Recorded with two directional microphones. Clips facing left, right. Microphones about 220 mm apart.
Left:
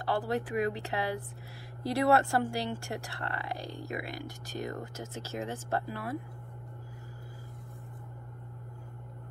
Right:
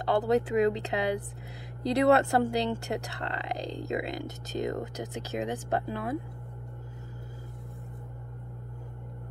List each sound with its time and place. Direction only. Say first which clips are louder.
0.0 s speech: right 6 dB; 20° right (ahead or behind)